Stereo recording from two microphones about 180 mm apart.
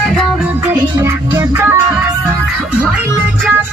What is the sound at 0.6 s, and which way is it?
Music, 15° right (ahead or behind).